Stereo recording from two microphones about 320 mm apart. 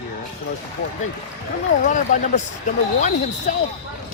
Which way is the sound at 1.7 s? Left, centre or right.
Left.